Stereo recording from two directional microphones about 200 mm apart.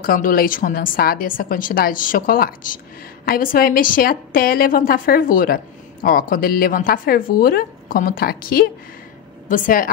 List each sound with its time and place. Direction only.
0.0 s a woman's voice: 45° left (ahead or behind)